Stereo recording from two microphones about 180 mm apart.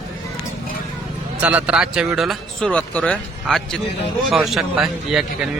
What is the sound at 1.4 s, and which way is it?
Speech, 10° right (ahead or behind).